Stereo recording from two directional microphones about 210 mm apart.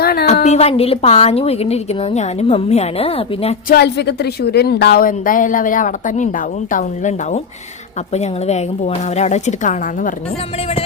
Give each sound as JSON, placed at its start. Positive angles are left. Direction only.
{"t": 0.0, "sound": "a sound", "side_deg": 45}
{"t": 0.4, "sound": "a woman's voice", "side_deg": 30}
{"t": 3.7, "sound": "a woman's voice", "side_deg": 50}